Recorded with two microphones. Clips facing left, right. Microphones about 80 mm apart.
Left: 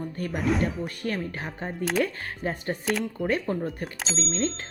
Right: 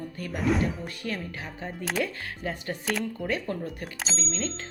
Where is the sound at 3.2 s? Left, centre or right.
Left.